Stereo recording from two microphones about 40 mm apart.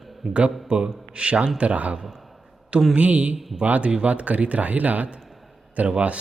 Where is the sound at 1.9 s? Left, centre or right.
Centre.